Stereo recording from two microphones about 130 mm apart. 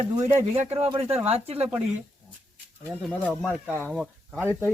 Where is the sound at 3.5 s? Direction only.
10° right (ahead or behind).